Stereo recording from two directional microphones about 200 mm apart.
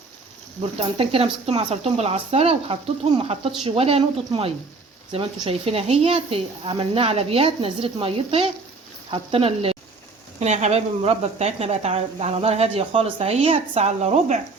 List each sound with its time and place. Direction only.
0.6 s speech: 30° right (ahead or behind)